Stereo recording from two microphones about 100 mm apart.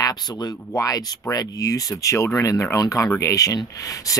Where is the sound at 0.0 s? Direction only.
40° left (ahead or behind).